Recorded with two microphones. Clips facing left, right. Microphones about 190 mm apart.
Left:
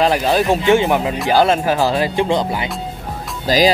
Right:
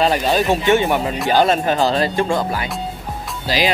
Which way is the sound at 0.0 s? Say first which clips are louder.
Left 1 dB; 10° left (ahead or behind).